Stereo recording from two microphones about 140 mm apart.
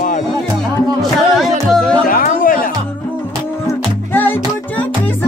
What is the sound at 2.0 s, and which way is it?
Music, 75° left (ahead or behind).